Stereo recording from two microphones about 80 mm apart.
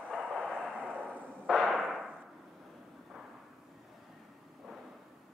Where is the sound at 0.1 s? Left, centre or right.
Centre.